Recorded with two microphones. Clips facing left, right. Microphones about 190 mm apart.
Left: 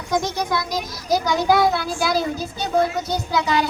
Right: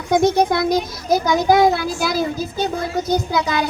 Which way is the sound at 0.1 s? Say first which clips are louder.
Right 7 dB; 55° right (ahead or behind).